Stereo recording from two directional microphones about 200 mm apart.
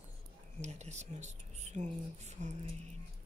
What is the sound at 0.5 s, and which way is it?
Speech, 35° right (ahead or behind).